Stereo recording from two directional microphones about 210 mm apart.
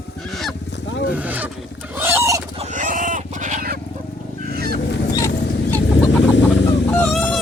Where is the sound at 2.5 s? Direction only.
35° right (ahead or behind).